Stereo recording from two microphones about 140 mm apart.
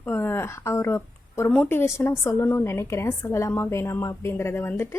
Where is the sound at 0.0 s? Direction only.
15° left (ahead or behind).